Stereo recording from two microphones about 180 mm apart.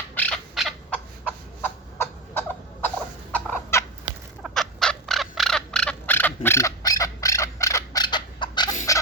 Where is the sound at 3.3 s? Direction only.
10° left (ahead or behind).